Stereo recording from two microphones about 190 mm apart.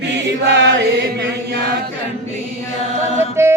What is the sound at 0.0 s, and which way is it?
Chant, 65° right (ahead or behind).